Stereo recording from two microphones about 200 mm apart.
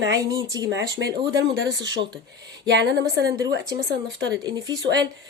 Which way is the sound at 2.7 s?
60° right (ahead or behind).